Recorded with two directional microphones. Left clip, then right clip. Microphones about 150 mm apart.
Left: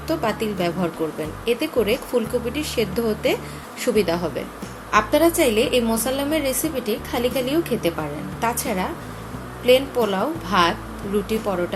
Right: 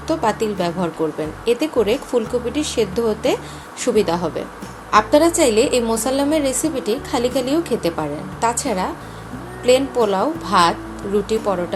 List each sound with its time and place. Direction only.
0.1 s a woman's voice: 20° right (ahead or behind)